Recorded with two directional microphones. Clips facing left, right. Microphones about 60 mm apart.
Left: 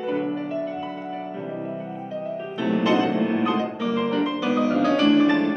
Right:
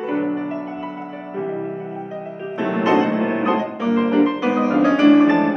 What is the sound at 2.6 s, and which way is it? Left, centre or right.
Music, right.